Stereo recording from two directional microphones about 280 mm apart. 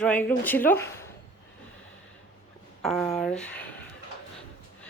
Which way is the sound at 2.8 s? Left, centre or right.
Centre.